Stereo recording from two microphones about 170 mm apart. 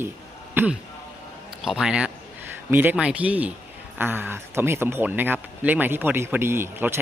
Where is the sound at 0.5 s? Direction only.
10° right (ahead or behind).